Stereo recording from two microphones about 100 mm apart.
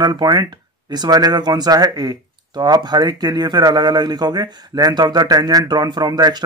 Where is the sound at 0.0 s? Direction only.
40° right (ahead or behind).